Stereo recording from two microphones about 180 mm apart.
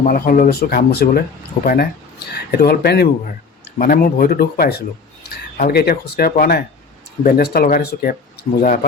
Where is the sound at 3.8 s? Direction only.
50° left (ahead or behind).